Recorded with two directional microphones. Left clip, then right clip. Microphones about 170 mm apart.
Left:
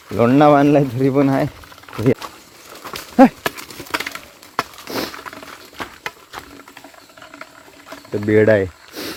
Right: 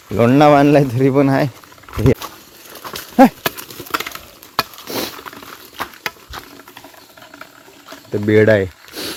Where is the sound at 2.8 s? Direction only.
15° right (ahead or behind).